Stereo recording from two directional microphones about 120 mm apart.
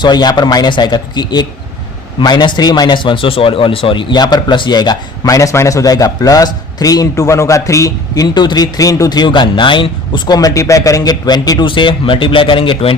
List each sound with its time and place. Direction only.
0.0 s a man's voice: 35° left (ahead or behind)